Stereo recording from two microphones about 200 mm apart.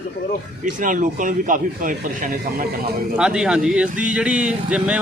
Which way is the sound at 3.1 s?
5° right (ahead or behind).